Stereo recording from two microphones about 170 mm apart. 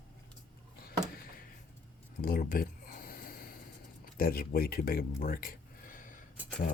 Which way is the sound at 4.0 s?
60° left (ahead or behind).